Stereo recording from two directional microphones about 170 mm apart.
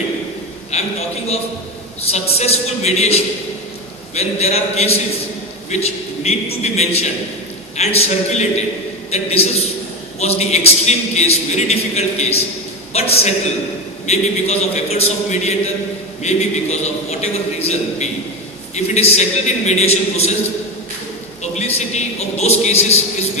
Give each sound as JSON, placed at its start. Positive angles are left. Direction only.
{"t": 0.7, "sound": "a man's voice", "side_deg": 40}
{"t": 21.4, "sound": "a man's voice", "side_deg": 40}